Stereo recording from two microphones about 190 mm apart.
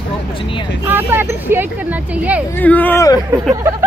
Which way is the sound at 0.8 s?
10° right (ahead or behind).